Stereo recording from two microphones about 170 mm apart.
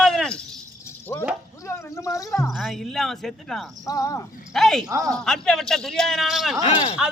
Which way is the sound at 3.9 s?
20° left (ahead or behind).